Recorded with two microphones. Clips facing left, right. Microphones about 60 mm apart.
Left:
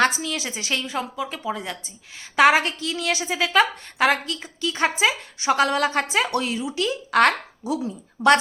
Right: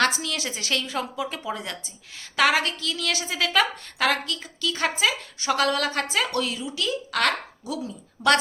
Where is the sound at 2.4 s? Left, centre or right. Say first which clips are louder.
Left 5 dB; left.